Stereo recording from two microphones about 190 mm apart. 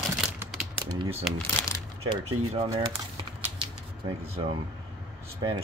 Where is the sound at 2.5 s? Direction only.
30° right (ahead or behind).